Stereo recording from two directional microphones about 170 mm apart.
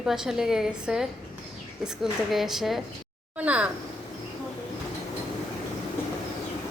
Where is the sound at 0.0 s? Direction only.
5° right (ahead or behind).